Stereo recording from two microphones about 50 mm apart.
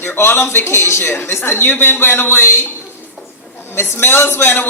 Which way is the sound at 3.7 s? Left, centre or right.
Left.